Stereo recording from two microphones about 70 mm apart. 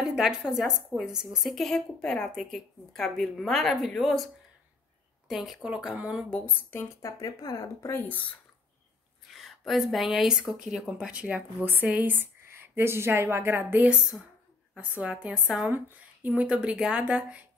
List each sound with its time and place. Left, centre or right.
0.0 s a sound: centre
0.4 s a woman's voice: centre
5.3 s speech: centre
6.3 s speech: left
7.0 s speech: left
7.9 s speech: left
9.3 s speech: centre
11.6 s a woman's voice: right; by 15.7 s centre
15.7 s speech: right
16.4 s speech: centre